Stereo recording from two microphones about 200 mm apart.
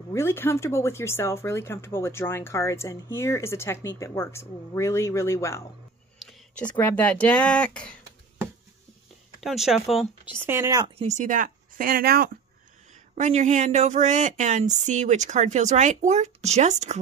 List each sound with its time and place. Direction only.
0.1 s speech: 15° left (ahead or behind)
6.1 s a sound: 5° left (ahead or behind)
6.7 s speech: 10° left (ahead or behind)
9.4 s speech: centre (ahead or behind)
10.4 s speech: 10° right (ahead or behind)
11.0 s speech: 35° right (ahead or behind)
13.1 s speech: 35° right (ahead or behind)